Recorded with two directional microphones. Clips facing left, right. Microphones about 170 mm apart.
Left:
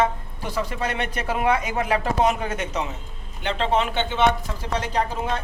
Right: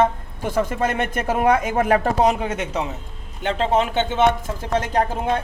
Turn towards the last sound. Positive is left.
turn(degrees=-50)  # may be behind; listen again after turning